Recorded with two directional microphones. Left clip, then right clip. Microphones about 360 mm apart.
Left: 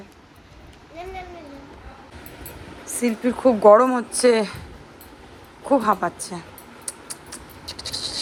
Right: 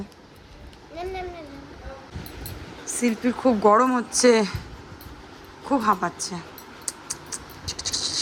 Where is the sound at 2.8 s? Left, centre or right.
Centre.